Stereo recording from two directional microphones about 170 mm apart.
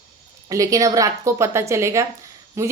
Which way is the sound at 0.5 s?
20° right (ahead or behind).